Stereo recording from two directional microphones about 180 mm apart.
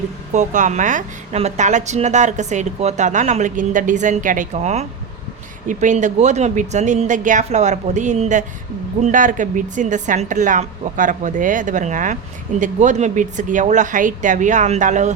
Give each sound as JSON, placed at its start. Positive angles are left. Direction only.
{"t": 0.3, "sound": "a woman's voice", "side_deg": -40}